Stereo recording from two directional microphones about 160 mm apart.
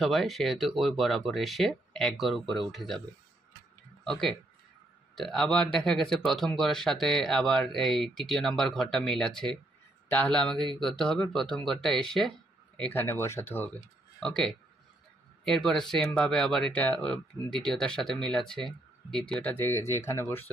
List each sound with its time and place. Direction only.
0.0 s speech: centre (ahead or behind)
4.0 s speech: centre (ahead or behind)
13.7 s speech: 5° left (ahead or behind)